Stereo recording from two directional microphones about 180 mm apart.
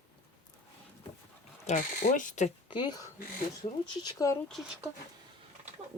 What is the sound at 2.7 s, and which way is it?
Speech, 25° left (ahead or behind).